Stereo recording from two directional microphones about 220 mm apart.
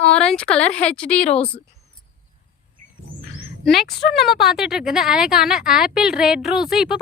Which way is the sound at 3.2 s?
55° left (ahead or behind).